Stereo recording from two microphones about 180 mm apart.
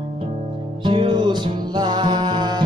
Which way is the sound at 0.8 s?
25° right (ahead or behind).